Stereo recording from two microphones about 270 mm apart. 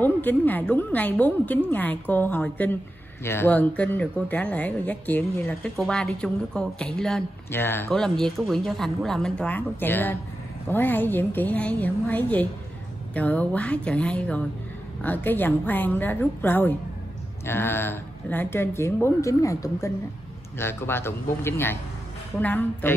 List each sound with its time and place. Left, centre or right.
0.0 s speech: centre